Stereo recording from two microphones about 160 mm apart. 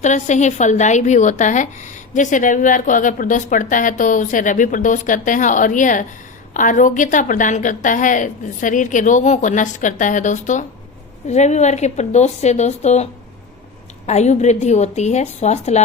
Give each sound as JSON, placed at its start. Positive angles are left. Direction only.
{"t": 0.0, "sound": "a woman's voice", "side_deg": 50}
{"t": 14.1, "sound": "a woman's voice", "side_deg": 45}